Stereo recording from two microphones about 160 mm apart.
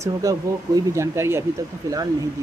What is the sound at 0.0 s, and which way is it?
Speech, 20° right (ahead or behind).